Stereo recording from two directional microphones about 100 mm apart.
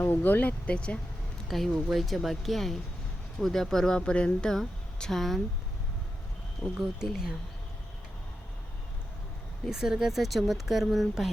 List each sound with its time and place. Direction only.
0.0 s speech: 20° left (ahead or behind)
1.5 s speech: centre (ahead or behind)
6.7 s speech: 5° right (ahead or behind)
9.6 s speech: 5° right (ahead or behind)